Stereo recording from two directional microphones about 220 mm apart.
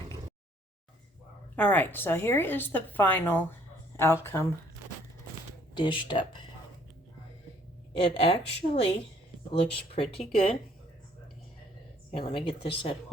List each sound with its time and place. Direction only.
1.5 s a woman's voice: 10° left (ahead or behind)
5.7 s speech: 20° left (ahead or behind)
7.9 s speech: 25° left (ahead or behind)
12.4 s speech: 25° left (ahead or behind)